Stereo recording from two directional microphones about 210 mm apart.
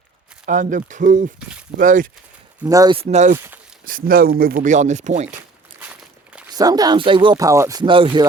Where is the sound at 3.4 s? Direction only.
5° right (ahead or behind).